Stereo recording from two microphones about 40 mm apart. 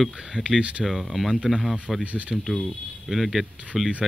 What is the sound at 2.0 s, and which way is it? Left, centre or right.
Speech, right.